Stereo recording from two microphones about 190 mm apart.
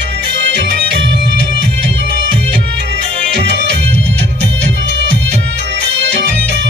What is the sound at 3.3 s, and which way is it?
Music, 65° right (ahead or behind).